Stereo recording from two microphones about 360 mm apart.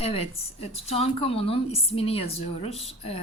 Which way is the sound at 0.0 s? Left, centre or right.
Centre.